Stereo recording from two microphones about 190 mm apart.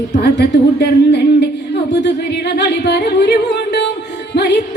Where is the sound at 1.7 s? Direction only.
65° left (ahead or behind).